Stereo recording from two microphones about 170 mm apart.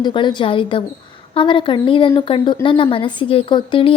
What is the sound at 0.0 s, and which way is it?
A woman's voice, 25° left (ahead or behind).